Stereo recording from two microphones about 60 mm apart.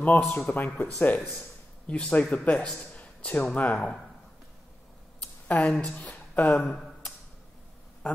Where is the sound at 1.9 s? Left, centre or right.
Centre.